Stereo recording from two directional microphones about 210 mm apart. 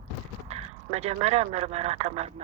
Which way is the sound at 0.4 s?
30° right (ahead or behind).